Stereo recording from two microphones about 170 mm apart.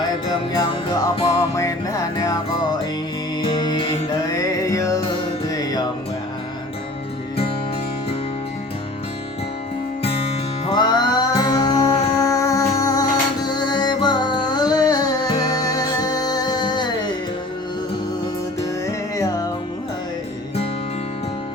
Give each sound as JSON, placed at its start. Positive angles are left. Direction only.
{"t": 1.3, "sound": "music", "side_deg": 20}
{"t": 3.4, "sound": "music", "side_deg": 25}
{"t": 10.0, "sound": "music", "side_deg": 35}
{"t": 18.9, "sound": "music", "side_deg": 20}